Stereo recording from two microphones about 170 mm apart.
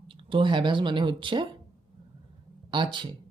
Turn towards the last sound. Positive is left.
turn(degrees=-30)  # may be behind; listen again after turning